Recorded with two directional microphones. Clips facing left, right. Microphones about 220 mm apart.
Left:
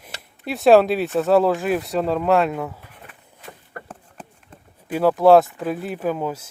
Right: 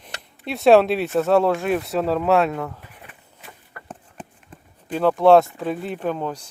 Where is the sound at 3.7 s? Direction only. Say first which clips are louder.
Left 8 dB; 50° left (ahead or behind).